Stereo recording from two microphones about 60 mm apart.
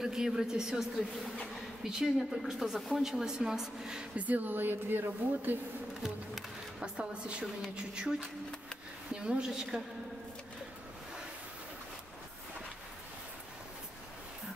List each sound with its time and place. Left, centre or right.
0.0 s speech: centre
4.2 s speech: right
6.0 s music: centre
7.7 s speech: centre
8.2 s speech: centre
9.1 s speech: centre